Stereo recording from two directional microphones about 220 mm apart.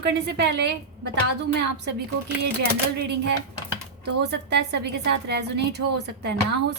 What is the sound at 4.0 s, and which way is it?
A woman's voice, 50° right (ahead or behind).